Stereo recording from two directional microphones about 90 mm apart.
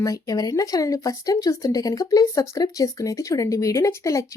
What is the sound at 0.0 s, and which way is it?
Speech, 40° left (ahead or behind).